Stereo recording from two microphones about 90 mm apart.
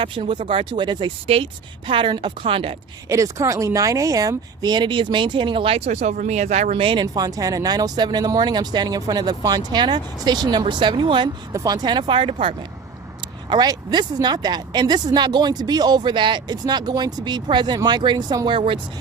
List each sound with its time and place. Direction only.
0.0 s speech: 80° right
1.9 s speech: 65° right (ahead or behind)
3.1 s speech: 35° right (ahead or behind); by 7.0 s 90° right
7.0 s speech: 45° right (ahead or behind)
9.7 s speech: 55° right (ahead or behind)
11.5 s speech: 40° right (ahead or behind); by 12.5 s 70° right (ahead or behind)
13.5 s speech: 50° right (ahead or behind)
18.4 s speech: 65° right (ahead or behind)